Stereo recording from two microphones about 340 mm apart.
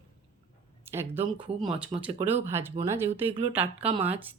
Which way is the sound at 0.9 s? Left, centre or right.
Centre.